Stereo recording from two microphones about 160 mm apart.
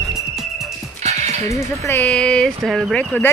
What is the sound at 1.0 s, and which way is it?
Music, 45° right (ahead or behind).